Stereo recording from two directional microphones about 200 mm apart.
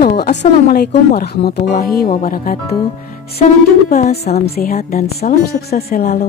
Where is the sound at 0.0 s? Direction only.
50° left (ahead or behind).